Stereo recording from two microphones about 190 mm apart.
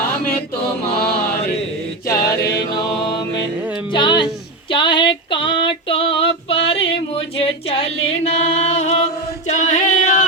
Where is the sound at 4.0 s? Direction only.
25° left (ahead or behind).